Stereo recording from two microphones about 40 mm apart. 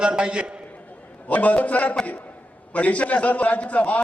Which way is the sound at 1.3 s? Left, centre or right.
Left.